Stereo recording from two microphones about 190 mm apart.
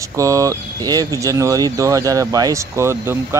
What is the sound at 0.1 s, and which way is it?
Speech, 15° right (ahead or behind).